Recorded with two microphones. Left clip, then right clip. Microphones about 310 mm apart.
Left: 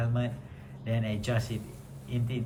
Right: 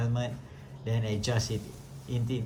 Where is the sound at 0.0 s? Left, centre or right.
Centre.